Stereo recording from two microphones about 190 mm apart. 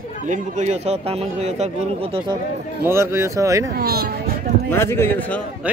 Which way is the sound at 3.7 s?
55° right (ahead or behind).